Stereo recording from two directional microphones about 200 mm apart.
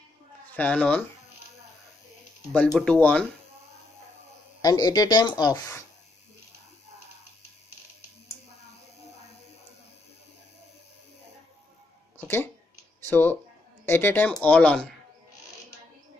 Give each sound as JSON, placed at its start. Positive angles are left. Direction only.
{"t": 0.6, "sound": "speech", "side_deg": 5}
{"t": 2.5, "sound": "speech", "side_deg": 5}
{"t": 4.6, "sound": "speech", "side_deg": 20}
{"t": 12.2, "sound": "a sound", "side_deg": 10}
{"t": 13.1, "sound": "speech", "side_deg": 10}